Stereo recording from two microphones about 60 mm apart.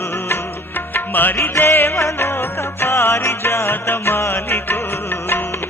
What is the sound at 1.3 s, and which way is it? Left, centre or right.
Music, left.